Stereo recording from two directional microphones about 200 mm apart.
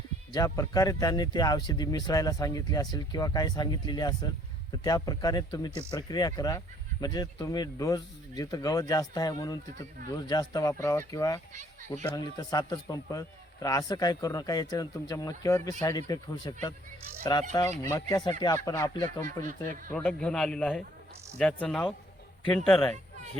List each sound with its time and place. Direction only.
0.3 s a man's voice: 20° left (ahead or behind)
19.9 s a man's voice: 5° left (ahead or behind)